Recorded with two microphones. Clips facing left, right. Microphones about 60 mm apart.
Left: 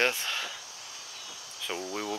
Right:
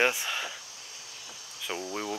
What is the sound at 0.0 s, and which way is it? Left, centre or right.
Cricket, centre.